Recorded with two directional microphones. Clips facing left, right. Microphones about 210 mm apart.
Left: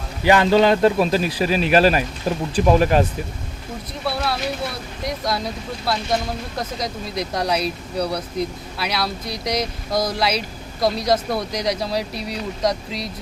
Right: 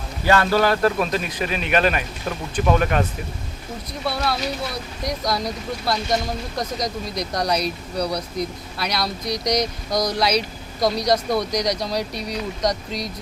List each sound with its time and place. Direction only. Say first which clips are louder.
0.3 s a man's voice: left 3 dB; 15° left (ahead or behind)
4.0 s speech: even; 5° left (ahead or behind)